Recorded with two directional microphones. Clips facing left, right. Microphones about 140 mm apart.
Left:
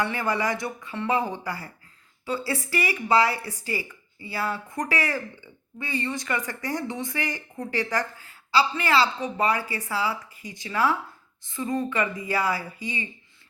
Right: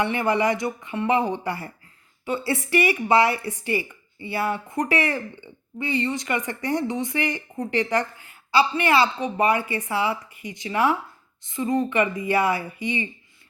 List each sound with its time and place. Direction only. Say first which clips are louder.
0.0 s speech: right 4 dB; 20° right (ahead or behind)